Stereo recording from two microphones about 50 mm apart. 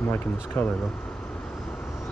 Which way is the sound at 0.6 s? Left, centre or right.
Left.